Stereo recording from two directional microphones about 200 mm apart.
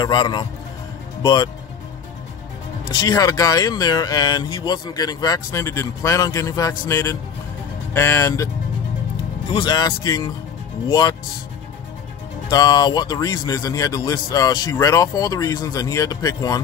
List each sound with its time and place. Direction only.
0.0 s a man's voice: 20° left (ahead or behind)
2.9 s a man's voice: 20° left (ahead or behind)
12.4 s speech: 20° left (ahead or behind)